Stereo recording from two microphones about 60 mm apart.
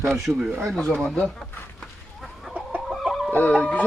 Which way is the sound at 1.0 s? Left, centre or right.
Centre.